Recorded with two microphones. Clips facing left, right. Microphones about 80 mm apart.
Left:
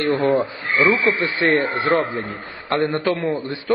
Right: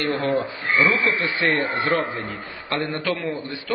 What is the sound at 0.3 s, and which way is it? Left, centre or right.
A man's voice, left.